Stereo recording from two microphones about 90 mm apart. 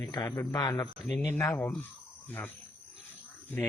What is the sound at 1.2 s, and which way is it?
Speech, 30° left (ahead or behind).